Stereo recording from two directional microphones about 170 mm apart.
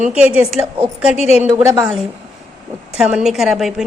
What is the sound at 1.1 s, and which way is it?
Speech, 40° left (ahead or behind).